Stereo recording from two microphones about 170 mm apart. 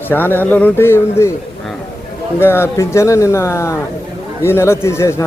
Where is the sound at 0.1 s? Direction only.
10° left (ahead or behind).